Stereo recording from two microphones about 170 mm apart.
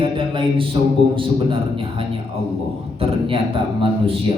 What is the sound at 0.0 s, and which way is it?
A man's voice, 30° right (ahead or behind).